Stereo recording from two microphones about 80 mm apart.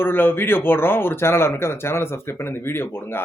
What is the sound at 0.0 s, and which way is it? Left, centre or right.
Speech, left.